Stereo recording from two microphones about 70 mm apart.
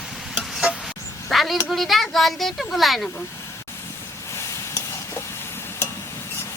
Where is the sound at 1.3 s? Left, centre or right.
Centre.